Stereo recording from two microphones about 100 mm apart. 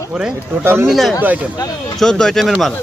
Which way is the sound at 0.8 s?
Centre (ahead or behind).